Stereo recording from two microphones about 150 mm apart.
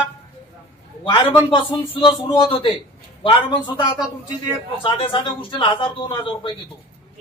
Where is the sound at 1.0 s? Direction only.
30° left (ahead or behind).